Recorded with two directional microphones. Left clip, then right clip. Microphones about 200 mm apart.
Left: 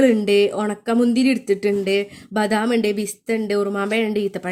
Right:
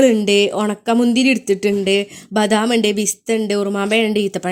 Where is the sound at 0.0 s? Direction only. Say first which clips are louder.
Right 2 dB; 20° right (ahead or behind).